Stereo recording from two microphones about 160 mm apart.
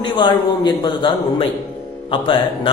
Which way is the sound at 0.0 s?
30° left (ahead or behind).